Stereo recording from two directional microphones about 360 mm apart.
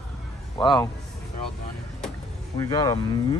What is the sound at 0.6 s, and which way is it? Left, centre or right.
Speech, centre.